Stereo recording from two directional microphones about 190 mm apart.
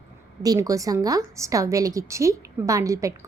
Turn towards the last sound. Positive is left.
turn(degrees=-15)  # may be behind; listen again after turning